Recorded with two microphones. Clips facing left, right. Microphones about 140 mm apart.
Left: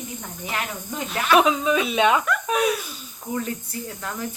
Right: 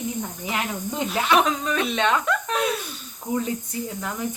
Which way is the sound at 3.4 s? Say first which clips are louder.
Right 2 dB; 20° right (ahead or behind).